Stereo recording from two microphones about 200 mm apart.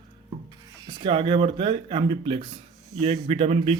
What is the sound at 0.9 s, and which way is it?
A man's voice, 25° right (ahead or behind).